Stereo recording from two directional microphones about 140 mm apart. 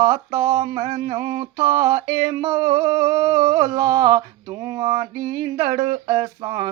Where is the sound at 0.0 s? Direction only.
30° right (ahead or behind).